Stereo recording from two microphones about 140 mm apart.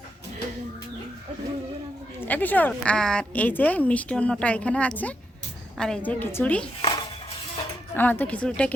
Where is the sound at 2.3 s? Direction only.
10° left (ahead or behind).